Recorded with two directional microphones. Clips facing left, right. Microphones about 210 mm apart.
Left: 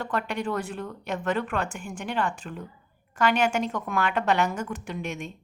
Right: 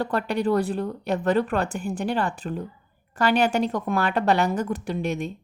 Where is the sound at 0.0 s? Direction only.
35° right (ahead or behind).